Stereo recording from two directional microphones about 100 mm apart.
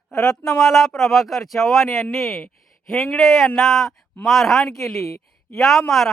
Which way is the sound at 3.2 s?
Centre (ahead or behind).